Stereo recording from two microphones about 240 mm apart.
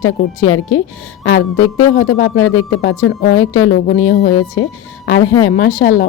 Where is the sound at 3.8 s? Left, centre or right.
Left.